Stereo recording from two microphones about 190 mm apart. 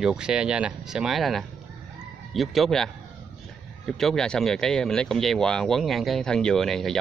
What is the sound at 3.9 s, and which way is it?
Speech, centre (ahead or behind).